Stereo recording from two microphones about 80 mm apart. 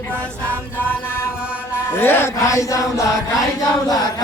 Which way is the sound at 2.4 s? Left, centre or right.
Left.